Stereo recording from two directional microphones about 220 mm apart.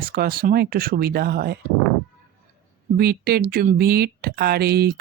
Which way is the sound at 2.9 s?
45° right (ahead or behind).